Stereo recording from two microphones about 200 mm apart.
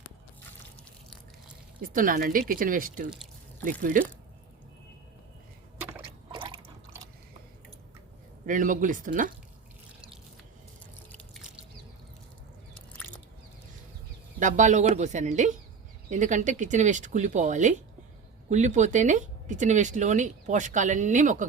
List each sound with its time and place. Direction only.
1.8 s speech: 45° right (ahead or behind)
6.3 s drip: 25° right (ahead or behind)
8.4 s speech: 40° right (ahead or behind)
12.7 s biting: 5° left (ahead or behind)
14.3 s speech: 40° right (ahead or behind)